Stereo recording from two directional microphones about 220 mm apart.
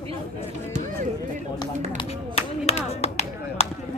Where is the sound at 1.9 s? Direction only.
25° left (ahead or behind).